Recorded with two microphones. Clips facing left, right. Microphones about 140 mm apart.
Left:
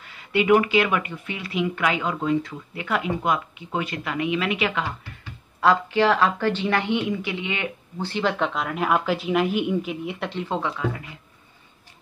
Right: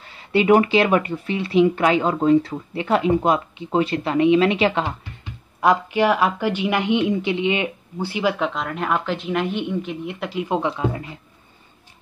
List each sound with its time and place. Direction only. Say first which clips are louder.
0.0 s speech: right 4 dB; 30° right (ahead or behind)
5.2 s a woman's voice: right 1 dB; 15° right (ahead or behind)
10.9 s speech: right 3 dB; 30° right (ahead or behind)